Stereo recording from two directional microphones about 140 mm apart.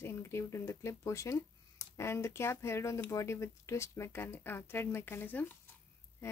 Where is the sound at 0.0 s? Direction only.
20° left (ahead or behind).